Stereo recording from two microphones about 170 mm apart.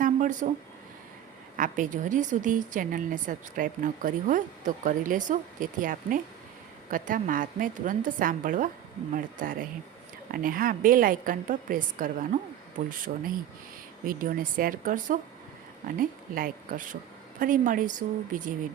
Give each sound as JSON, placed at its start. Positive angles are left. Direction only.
{"t": 0.0, "sound": "a sound", "side_deg": -50}
{"t": 1.5, "sound": "a woman's voice", "side_deg": -50}
{"t": 14.1, "sound": "a woman's voice", "side_deg": -55}